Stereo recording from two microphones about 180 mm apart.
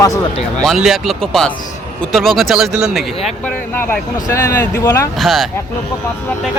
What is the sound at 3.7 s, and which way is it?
Speech, 15° left (ahead or behind).